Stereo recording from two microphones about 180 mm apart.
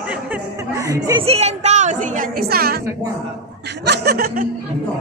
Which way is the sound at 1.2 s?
35° right (ahead or behind).